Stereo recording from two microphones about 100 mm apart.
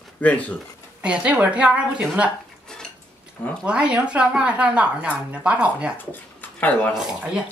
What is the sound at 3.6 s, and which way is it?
A woman's voice, 10° right (ahead or behind).